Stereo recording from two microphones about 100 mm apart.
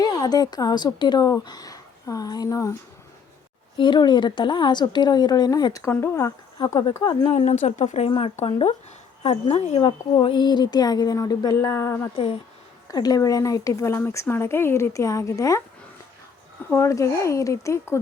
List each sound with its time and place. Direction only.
0.0 s a woman's voice: 40° left (ahead or behind)
3.8 s speech: 50° left (ahead or behind)
6.0 s speech: 25° left (ahead or behind)
6.7 s speech: 50° left (ahead or behind)
7.6 s a woman's voice: 90° left
8.2 s speech: 80° left
9.2 s a woman's voice: 90° left
10.2 s speech: 50° left (ahead or behind)
11.5 s speech: 25° left (ahead or behind)
12.9 s speech: 40° left (ahead or behind)
16.6 s speech: 30° left (ahead or behind)